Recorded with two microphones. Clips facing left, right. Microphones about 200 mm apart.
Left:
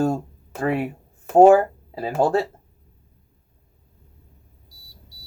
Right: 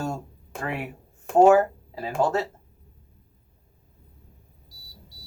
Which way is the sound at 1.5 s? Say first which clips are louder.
Left 1 dB; 30° left (ahead or behind).